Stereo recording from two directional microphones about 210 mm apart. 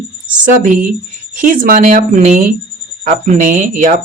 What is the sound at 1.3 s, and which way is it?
Speech, 40° right (ahead or behind).